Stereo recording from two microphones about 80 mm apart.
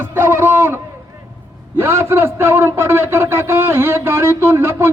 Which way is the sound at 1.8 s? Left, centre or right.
Right.